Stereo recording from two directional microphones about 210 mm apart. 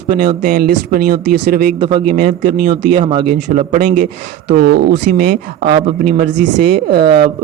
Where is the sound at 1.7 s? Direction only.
20° right (ahead or behind).